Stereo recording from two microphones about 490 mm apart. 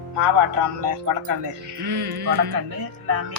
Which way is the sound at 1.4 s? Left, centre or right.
Right.